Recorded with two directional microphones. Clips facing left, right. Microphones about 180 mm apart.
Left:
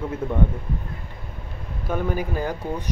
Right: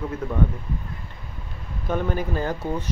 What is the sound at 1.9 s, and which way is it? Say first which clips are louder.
Speech: even; 10° left (ahead or behind).